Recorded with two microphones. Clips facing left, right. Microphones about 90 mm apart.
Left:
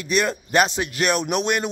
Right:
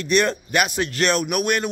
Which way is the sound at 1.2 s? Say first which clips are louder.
Even; 25° left (ahead or behind).